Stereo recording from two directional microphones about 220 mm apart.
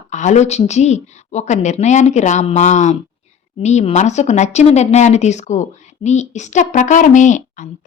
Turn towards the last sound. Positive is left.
turn(degrees=35)  # may be behind; listen again after turning